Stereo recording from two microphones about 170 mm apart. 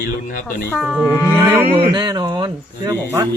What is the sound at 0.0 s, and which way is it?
Speech, 55° left (ahead or behind).